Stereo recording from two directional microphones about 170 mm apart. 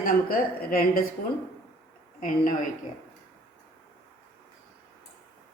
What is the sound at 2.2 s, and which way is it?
Speech, 55° left (ahead or behind).